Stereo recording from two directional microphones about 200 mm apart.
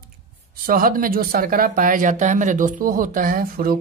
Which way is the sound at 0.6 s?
45° right (ahead or behind).